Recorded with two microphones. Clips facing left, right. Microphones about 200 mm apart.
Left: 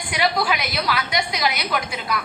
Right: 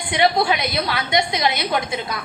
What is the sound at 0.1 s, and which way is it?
A woman's voice, 25° right (ahead or behind).